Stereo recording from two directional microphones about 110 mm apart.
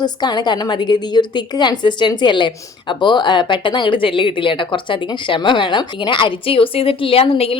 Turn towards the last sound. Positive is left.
turn(degrees=60)  # may be behind; listen again after turning